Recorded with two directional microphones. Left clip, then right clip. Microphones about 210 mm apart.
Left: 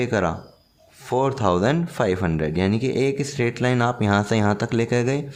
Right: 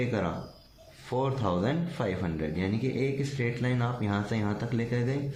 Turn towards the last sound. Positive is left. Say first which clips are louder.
# left 10 dB
turn(degrees=50)  # may be behind; listen again after turning